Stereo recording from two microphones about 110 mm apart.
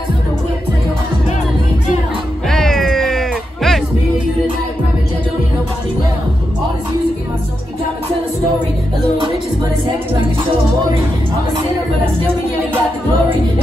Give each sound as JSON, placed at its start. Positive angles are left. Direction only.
{"t": 2.5, "sound": "cat", "side_deg": 5}